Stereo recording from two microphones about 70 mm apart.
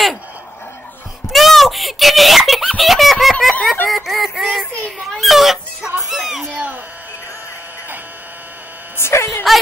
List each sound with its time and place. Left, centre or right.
1.3 s screaming: centre
2.8 s baby laughter: centre
3.8 s synthetic singing: centre
5.1 s a sound: centre
5.9 s music: centre
6.5 s speech: right
8.9 s speech: left